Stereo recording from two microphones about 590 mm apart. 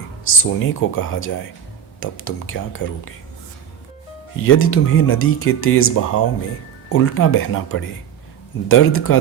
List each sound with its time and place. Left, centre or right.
0.3 s speech: centre
4.4 s speech: left